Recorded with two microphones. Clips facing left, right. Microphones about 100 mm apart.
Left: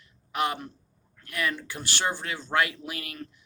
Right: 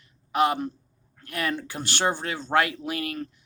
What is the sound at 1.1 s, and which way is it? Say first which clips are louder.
A man's voice: right 2 dB; 35° right (ahead or behind).